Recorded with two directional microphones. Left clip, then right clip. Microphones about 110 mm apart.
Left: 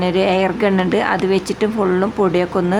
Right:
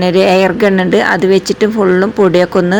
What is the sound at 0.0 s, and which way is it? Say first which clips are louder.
A woman's voice: right 7 dB; 30° right (ahead or behind).